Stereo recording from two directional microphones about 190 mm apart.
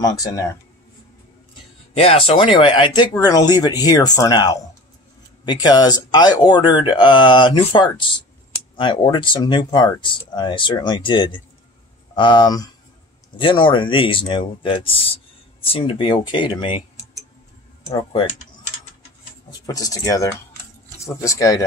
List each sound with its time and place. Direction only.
0.0 s speech: 20° left (ahead or behind)
2.0 s speech: 30° left (ahead or behind)
19.6 s speech: 20° left (ahead or behind)